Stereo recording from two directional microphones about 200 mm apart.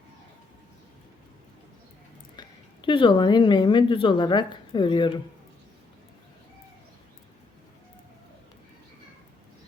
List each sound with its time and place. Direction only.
2.3 s a woman's voice: 20° left (ahead or behind)